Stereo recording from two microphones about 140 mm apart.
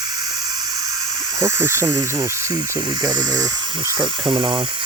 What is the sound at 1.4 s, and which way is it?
Speech, 20° right (ahead or behind).